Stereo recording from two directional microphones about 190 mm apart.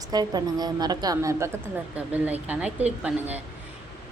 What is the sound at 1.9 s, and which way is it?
Speech, 10° right (ahead or behind).